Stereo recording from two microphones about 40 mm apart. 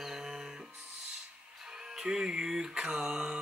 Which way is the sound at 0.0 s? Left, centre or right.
Centre.